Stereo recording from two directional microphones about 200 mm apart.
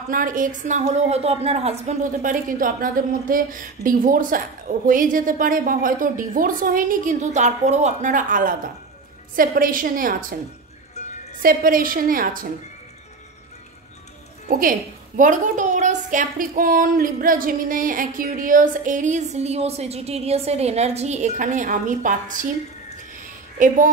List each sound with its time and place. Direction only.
0.1 s a woman's voice: 45° right (ahead or behind)
11.0 s music: 35° left (ahead or behind)
11.4 s a woman's voice: 45° right (ahead or behind)
14.6 s a woman's voice: 40° right (ahead or behind)